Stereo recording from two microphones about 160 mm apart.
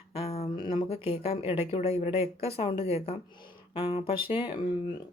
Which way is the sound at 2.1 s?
20° right (ahead or behind).